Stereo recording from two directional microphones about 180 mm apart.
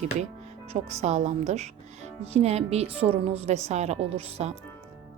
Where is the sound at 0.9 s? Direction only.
40° right (ahead or behind).